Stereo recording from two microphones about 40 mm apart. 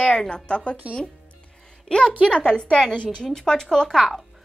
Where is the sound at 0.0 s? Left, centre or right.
Left.